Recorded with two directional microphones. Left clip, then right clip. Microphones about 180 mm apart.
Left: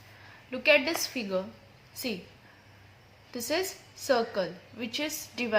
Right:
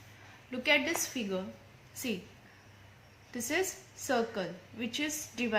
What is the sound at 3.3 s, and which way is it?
A woman's voice, 25° left (ahead or behind).